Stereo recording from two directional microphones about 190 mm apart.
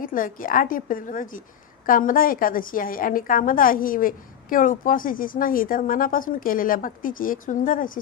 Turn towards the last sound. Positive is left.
turn(degrees=45)  # may be behind; listen again after turning